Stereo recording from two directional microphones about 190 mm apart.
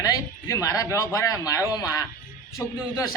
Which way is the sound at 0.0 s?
20° left (ahead or behind).